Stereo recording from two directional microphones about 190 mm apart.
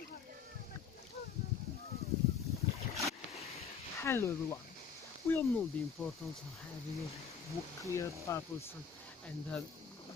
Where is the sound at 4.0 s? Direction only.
15° left (ahead or behind).